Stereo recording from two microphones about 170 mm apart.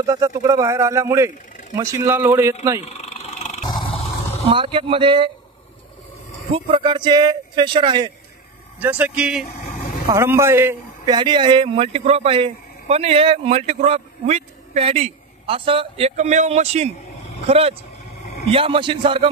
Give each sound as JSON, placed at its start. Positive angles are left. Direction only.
{"t": 0.0, "sound": "speech", "side_deg": -20}
{"t": 2.9, "sound": "vehicle", "side_deg": 40}
{"t": 3.6, "sound": "roar", "side_deg": 25}
{"t": 4.5, "sound": "speech", "side_deg": -30}
{"t": 6.5, "sound": "speech", "side_deg": -30}
{"t": 8.7, "sound": "speech", "side_deg": -10}
{"t": 10.0, "sound": "speech", "side_deg": -15}
{"t": 11.1, "sound": "speech", "side_deg": -25}
{"t": 16.2, "sound": "speech", "side_deg": -45}